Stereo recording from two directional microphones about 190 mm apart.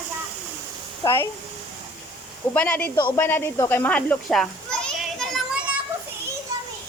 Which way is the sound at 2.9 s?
25° left (ahead or behind).